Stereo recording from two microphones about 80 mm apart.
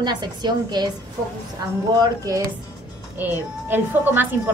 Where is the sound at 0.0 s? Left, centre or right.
Right.